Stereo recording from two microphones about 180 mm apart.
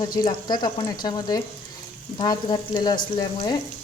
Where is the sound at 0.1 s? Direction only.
25° left (ahead or behind).